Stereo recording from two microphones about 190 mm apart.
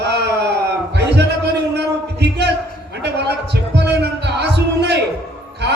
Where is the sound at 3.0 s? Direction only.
65° right (ahead or behind).